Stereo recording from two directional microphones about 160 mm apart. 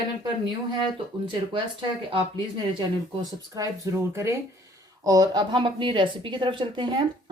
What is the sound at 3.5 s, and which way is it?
A woman's voice, 20° right (ahead or behind).